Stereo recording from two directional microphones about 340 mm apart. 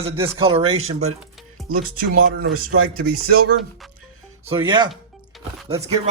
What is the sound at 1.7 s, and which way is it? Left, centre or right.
Speech, right.